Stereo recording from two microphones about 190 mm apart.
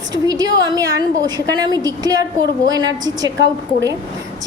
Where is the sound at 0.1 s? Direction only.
20° right (ahead or behind).